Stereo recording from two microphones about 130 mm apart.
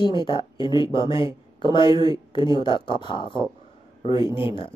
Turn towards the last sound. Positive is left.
turn(degrees=40)  # may be behind; listen again after turning